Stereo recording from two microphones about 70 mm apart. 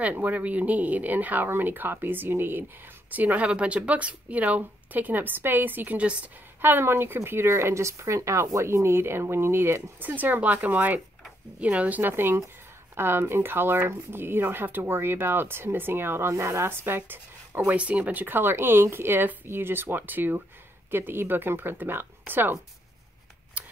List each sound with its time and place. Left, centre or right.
0.0 s speech: right
6.6 s speech: right
17.6 s speech: centre
18.2 s speech: right